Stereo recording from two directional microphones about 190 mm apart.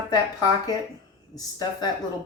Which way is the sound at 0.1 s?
20° left (ahead or behind).